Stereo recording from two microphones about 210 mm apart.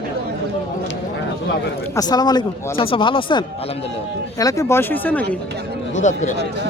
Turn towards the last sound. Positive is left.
turn(degrees=35)  # may be behind; listen again after turning